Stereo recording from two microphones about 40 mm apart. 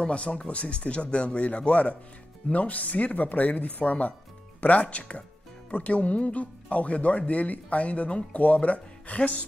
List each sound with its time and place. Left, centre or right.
0.0 s speech: left